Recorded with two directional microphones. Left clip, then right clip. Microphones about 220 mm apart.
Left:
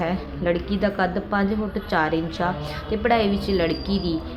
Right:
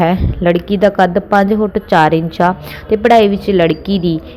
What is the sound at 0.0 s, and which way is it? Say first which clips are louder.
A woman's voice: right 12 dB; 35° right (ahead or behind).